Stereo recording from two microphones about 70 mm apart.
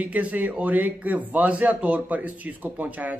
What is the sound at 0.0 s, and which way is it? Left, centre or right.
Speech, right.